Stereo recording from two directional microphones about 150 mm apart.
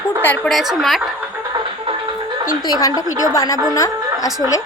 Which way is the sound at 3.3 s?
20° left (ahead or behind).